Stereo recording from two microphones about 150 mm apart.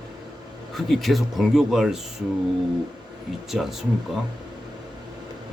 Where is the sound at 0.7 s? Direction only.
Centre (ahead or behind).